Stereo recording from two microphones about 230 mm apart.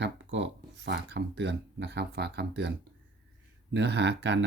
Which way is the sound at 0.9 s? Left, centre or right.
Right.